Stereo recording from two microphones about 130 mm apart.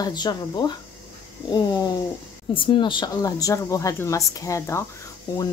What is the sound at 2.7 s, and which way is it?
Speech, 40° left (ahead or behind).